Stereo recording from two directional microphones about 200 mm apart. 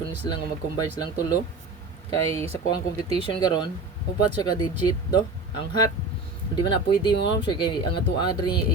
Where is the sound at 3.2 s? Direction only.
25° left (ahead or behind).